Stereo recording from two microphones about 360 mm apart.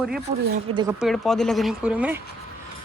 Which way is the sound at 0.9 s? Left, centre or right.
Centre.